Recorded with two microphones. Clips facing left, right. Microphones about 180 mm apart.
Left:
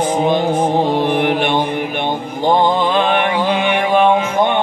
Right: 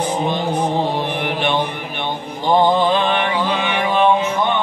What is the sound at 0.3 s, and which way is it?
Music, 50° left (ahead or behind).